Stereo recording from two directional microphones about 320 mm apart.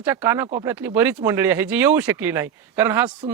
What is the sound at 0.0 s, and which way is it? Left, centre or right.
Speech, centre.